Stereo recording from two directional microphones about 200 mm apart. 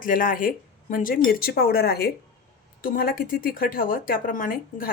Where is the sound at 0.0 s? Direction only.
45° left (ahead or behind).